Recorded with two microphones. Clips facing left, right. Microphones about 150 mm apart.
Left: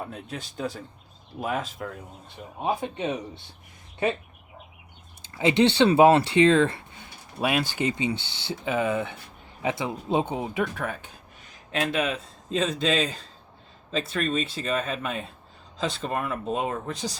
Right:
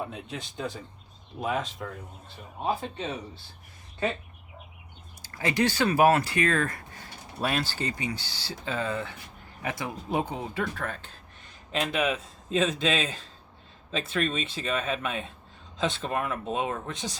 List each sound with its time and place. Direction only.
0.0 s speech: centre (ahead or behind)
2.6 s speech: 15° left (ahead or behind)
5.2 s speech: 20° left (ahead or behind)
11.7 s a man's voice: centre (ahead or behind)
13.9 s speech: centre (ahead or behind)
14.3 s speech: 40° left (ahead or behind)
14.6 s speech: centre (ahead or behind)
16.9 s speech: 35° left (ahead or behind)